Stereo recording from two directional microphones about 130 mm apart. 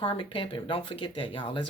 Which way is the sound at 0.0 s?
40° left (ahead or behind).